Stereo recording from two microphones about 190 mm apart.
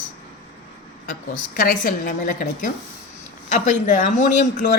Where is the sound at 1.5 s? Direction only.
50° left (ahead or behind).